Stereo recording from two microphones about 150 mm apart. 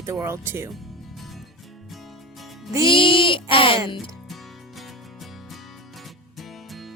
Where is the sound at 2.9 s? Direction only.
35° left (ahead or behind).